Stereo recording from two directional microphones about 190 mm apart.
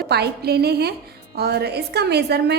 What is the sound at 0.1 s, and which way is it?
A woman's voice, 60° right (ahead or behind).